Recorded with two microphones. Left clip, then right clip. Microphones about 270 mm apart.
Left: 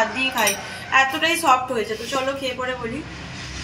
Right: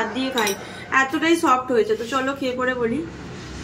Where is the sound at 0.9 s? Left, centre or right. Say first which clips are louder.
Left 1 dB; centre.